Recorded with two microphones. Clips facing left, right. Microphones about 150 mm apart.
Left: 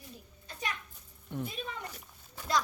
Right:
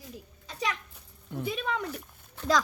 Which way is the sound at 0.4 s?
90° right.